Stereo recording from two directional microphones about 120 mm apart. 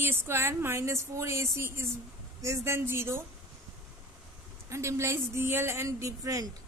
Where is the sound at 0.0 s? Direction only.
20° right (ahead or behind).